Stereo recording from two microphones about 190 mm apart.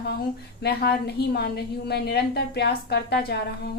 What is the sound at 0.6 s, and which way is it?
A woman's voice, 55° left (ahead or behind).